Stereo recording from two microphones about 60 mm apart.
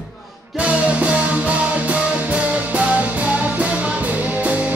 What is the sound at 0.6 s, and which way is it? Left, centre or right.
Music, right.